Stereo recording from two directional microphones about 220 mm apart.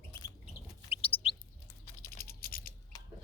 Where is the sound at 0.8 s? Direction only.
25° left (ahead or behind).